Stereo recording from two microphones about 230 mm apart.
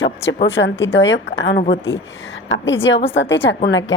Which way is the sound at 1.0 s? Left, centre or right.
Left.